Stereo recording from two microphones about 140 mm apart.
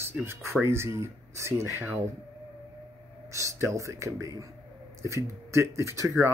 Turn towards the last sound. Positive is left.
turn(degrees=-20)  # may be behind; listen again after turning